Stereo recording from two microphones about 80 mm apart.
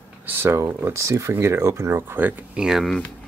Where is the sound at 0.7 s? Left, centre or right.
Right.